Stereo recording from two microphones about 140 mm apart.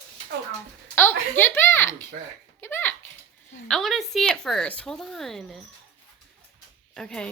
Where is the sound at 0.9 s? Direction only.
15° left (ahead or behind).